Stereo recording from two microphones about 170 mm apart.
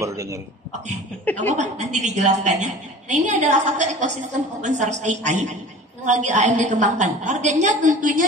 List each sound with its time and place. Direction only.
0.0 s speech: 20° right (ahead or behind)
1.5 s a woman's voice: 45° right (ahead or behind)